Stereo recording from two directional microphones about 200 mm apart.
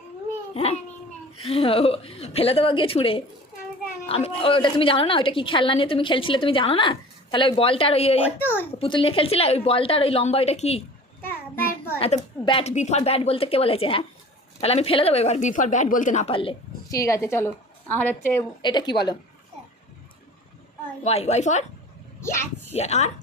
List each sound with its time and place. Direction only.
0.5 s a woman's voice: 30° left (ahead or behind)
11.9 s a woman's voice: 30° left (ahead or behind)
17.0 s a woman's voice: 15° left (ahead or behind)
21.0 s a woman's voice: 30° left (ahead or behind)
22.2 s speech: 15° left (ahead or behind)
22.7 s a woman's voice: 30° left (ahead or behind)